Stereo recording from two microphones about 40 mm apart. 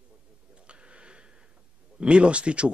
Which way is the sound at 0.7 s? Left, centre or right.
Right.